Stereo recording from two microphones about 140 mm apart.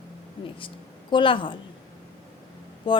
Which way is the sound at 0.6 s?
35° left (ahead or behind).